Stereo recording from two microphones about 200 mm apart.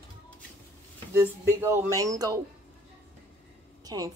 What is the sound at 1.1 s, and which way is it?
Speech, 15° right (ahead or behind).